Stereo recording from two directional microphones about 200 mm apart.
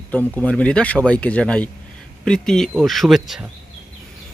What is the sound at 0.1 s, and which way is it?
Speech, 10° left (ahead or behind).